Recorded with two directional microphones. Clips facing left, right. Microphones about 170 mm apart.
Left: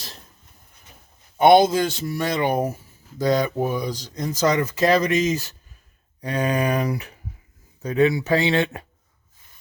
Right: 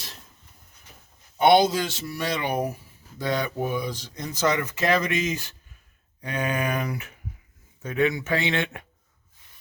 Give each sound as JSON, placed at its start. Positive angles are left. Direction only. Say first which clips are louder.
{"t": 1.4, "sound": "speech", "louder": "left 4 dB", "side_deg": 50}